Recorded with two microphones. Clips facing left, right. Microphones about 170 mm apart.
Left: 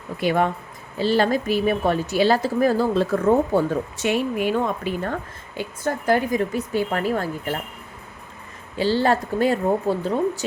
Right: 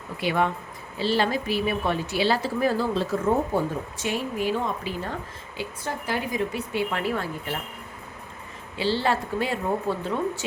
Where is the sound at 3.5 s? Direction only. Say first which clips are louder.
Left 5 dB; 70° left (ahead or behind); by 7.5 s 45° left (ahead or behind).